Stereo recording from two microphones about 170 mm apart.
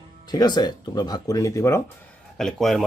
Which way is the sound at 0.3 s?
25° left (ahead or behind).